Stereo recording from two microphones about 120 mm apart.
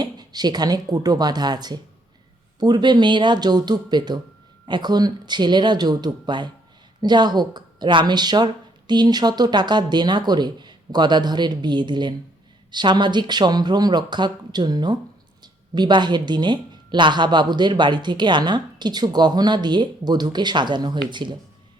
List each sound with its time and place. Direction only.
0.0 s speech: 35° right (ahead or behind)